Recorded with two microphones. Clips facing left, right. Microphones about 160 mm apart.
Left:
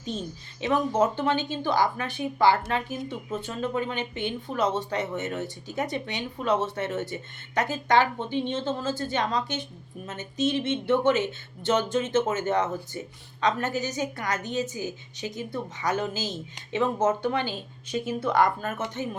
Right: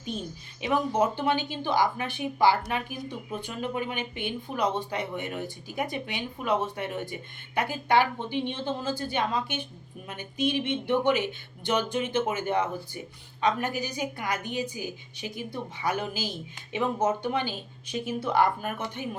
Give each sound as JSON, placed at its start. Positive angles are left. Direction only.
{"t": 0.6, "sound": "speech", "side_deg": -15}